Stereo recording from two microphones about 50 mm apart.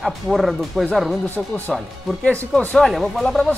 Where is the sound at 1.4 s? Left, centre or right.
Centre.